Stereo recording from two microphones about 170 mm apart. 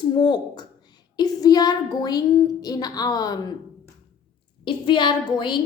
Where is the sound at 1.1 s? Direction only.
20° left (ahead or behind).